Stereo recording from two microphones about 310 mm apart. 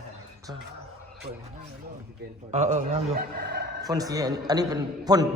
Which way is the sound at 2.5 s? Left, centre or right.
Right.